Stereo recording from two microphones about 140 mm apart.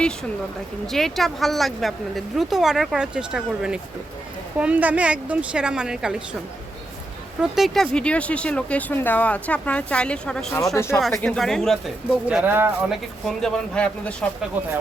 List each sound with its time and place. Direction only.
0.9 s a woman's voice: centre (ahead or behind)
7.4 s speech: centre (ahead or behind)
10.8 s speech: 20° left (ahead or behind)
11.2 s a woman's voice: 5° left (ahead or behind)
12.3 s a woman's voice: 10° right (ahead or behind)
12.9 s speech: centre (ahead or behind)
14.5 s a woman's voice: 10° right (ahead or behind)